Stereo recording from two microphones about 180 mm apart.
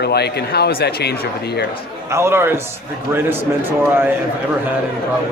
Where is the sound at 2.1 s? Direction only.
15° right (ahead or behind).